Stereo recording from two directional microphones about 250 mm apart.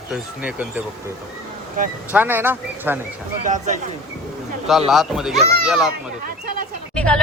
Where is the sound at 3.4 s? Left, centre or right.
Right.